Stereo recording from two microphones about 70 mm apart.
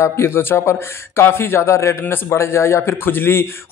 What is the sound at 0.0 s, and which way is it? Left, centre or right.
A man's voice, left.